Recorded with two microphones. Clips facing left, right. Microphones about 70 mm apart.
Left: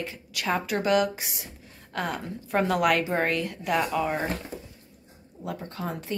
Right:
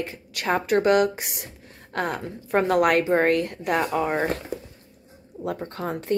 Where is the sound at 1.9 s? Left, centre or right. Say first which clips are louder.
Right 3 dB; right.